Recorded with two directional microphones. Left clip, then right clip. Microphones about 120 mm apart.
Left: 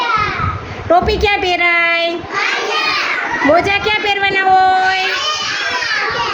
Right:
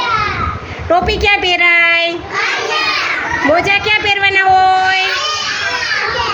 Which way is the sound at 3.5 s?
35° left (ahead or behind).